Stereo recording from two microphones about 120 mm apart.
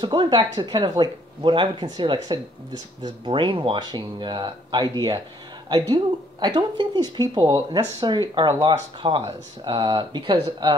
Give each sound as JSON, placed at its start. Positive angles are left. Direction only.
{"t": 0.0, "sound": "speech", "side_deg": -40}